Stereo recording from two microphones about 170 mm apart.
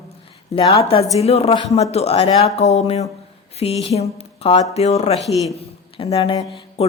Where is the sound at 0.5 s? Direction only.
35° left (ahead or behind).